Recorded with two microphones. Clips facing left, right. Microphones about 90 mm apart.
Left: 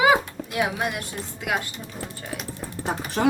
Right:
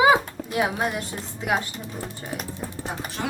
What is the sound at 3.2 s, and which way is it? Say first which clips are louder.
Speech: left 10 dB; 75° left (ahead or behind).